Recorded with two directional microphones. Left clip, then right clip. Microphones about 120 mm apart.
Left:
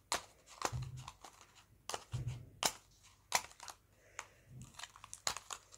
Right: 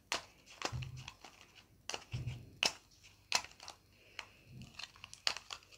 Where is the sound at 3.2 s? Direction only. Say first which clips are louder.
Right 1 dB; 30° left (ahead or behind).